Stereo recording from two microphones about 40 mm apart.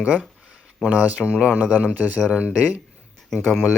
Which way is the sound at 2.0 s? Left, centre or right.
Right.